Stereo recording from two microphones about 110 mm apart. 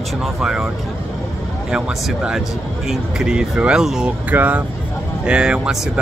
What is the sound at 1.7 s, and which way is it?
Speech, 5° right (ahead or behind).